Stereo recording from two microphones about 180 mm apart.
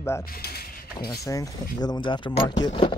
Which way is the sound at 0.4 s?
60° left (ahead or behind).